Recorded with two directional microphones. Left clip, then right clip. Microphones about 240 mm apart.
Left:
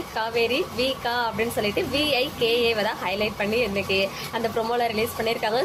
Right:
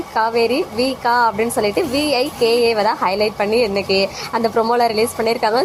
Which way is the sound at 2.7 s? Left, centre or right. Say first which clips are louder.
Right 8 dB; centre.